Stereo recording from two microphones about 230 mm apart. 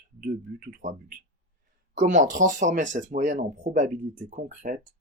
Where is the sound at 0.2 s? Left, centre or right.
Right.